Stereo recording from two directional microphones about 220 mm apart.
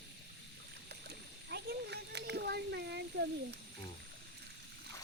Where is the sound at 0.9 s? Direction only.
50° right (ahead or behind).